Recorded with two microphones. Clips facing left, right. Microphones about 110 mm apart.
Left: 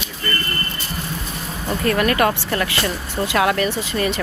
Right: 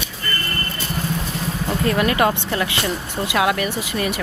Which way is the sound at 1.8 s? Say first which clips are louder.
Left 1 dB; 15° right (ahead or behind).